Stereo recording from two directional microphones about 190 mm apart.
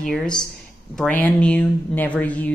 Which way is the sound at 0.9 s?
5° left (ahead or behind).